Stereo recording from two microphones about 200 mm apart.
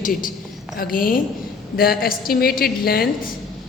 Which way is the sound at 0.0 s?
40° left (ahead or behind).